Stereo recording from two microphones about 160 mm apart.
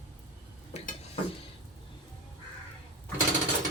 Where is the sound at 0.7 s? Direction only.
40° left (ahead or behind).